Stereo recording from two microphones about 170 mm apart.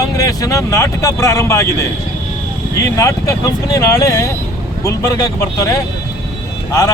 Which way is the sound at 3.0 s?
20° left (ahead or behind).